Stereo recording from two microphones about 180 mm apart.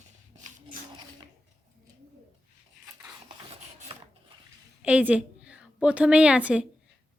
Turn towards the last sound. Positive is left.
turn(degrees=-5)  # may be behind; listen again after turning